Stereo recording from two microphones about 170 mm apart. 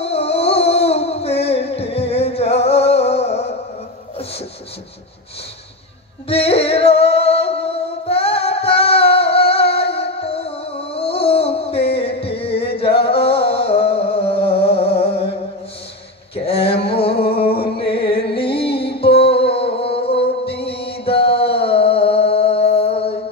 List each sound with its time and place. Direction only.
0.0 s music: 35° left (ahead or behind)
6.2 s singing: 35° left (ahead or behind)
13.2 s music: 35° left (ahead or behind)
14.8 s a sound: 35° left (ahead or behind)
16.3 s a sound: 35° left (ahead or behind)
17.8 s music: 75° left (ahead or behind)
18.3 s music: 30° left (ahead or behind)
18.7 s music: 75° left (ahead or behind)
19.4 s music: 35° left (ahead or behind)
20.7 s mantra: 75° left (ahead or behind)
21.0 s mantra: 30° left (ahead or behind)
21.6 s music: 35° left (ahead or behind)